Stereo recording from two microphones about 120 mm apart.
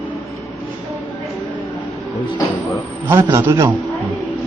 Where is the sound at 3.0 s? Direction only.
25° right (ahead or behind).